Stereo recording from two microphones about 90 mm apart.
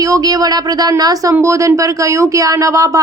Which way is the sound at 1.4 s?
35° right (ahead or behind).